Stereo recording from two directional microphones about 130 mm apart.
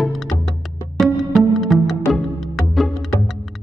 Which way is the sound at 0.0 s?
Centre (ahead or behind).